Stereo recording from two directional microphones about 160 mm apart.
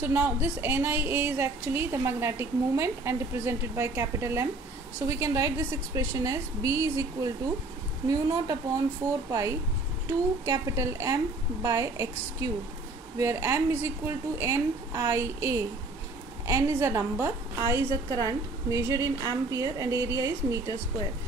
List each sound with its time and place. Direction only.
0.0 s a woman's voice: 10° right (ahead or behind)